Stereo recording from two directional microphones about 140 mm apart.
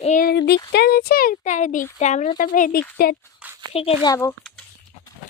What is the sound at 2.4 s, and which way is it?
Speech, 70° left (ahead or behind).